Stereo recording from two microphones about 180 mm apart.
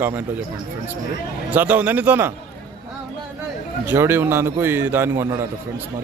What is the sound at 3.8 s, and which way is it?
A man's voice, 10° right (ahead or behind).